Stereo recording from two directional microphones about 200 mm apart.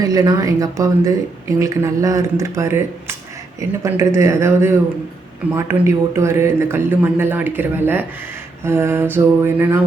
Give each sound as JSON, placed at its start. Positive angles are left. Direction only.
{"t": 0.0, "sound": "speech", "side_deg": -15}